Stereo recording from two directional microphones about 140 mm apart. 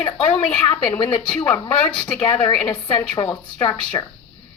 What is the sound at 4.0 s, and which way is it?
Speech, 30° left (ahead or behind).